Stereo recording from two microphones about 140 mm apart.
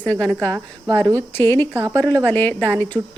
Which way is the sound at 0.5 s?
20° right (ahead or behind).